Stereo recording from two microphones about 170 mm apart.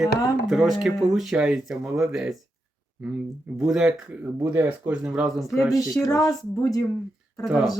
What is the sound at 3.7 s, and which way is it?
Speech, 5° right (ahead or behind).